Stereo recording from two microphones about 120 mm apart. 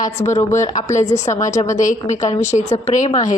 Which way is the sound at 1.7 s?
90° left.